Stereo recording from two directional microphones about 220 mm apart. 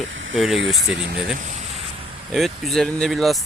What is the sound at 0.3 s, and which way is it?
Speech, centre (ahead or behind).